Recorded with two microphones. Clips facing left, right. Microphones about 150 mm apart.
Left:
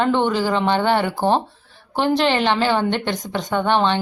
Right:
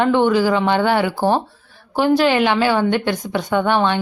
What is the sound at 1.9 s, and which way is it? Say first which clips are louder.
Speech: right 3 dB; 10° right (ahead or behind).